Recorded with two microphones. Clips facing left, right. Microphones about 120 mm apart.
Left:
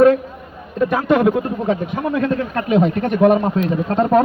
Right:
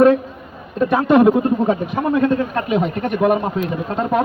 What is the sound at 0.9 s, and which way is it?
Speech, 5° right (ahead or behind).